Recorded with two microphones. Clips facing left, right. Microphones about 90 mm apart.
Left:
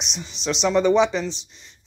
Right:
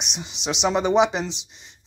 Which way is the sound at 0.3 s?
65° right (ahead or behind).